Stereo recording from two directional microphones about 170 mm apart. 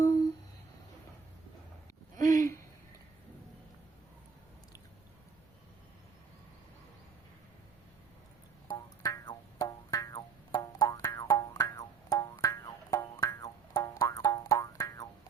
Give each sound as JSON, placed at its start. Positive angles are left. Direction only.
{"t": 2.1, "sound": "hoot", "side_deg": 20}
{"t": 8.7, "sound": "music", "side_deg": 25}